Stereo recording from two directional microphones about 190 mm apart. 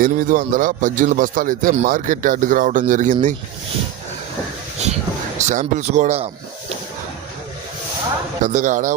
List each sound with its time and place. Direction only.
0.0 s a man's voice: 45° right (ahead or behind)
4.8 s speech: 35° right (ahead or behind)
8.4 s speech: 40° right (ahead or behind)